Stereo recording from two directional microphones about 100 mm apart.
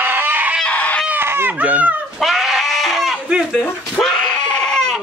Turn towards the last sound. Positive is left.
turn(degrees=5)  # may be behind; listen again after turning